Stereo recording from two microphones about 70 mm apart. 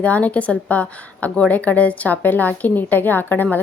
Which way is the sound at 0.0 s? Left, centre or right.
Left.